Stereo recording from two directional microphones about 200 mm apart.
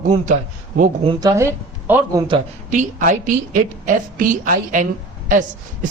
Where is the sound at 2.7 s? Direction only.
40° right (ahead or behind).